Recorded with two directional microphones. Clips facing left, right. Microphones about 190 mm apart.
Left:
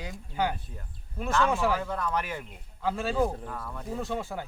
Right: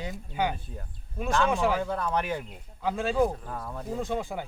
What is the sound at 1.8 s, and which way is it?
Speech, 25° right (ahead or behind).